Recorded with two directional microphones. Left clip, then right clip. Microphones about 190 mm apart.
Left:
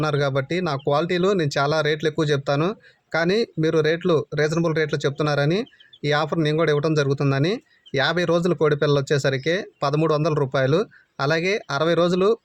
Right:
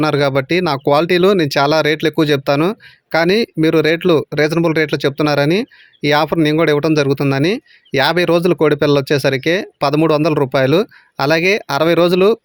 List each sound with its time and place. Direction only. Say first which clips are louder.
0.0 s speech: right 8 dB; 40° right (ahead or behind)